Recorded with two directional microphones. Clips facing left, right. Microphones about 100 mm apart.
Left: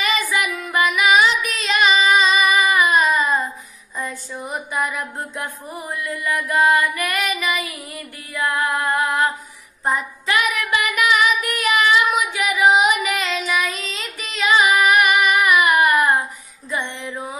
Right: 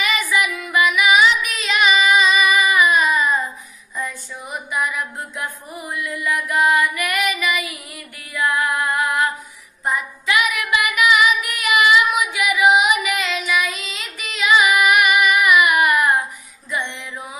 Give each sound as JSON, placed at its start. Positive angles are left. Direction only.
{"t": 0.0, "sound": "child singing", "side_deg": 40}
{"t": 4.0, "sound": "a sound", "side_deg": 35}
{"t": 6.8, "sound": "female singing", "side_deg": 40}
{"t": 9.8, "sound": "child singing", "side_deg": 35}
{"t": 16.7, "sound": "music", "side_deg": 30}